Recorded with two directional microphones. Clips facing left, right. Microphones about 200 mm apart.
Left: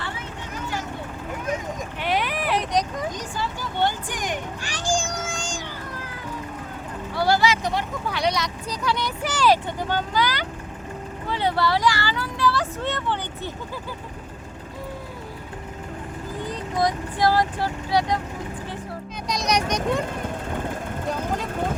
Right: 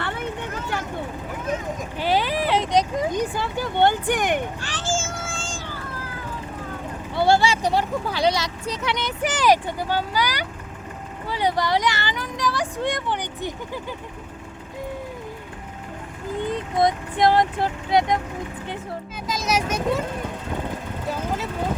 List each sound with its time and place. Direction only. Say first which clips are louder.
0.0 s vehicle: right 5 dB; 60° right (ahead or behind)
2.0 s vehicle: right 4 dB; 30° right (ahead or behind)
3.1 s speech: right 5 dB; 60° right (ahead or behind)
4.6 s a sound: left 1 dB; 15° left (ahead or behind)
7.2 s speech: right 2 dB; 25° right (ahead or behind)
16.4 s speech: right 3 dB; 25° right (ahead or behind)
19.3 s a child's voice: even; 5° right (ahead or behind)